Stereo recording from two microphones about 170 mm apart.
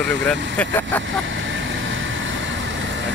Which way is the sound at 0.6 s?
10° left (ahead or behind).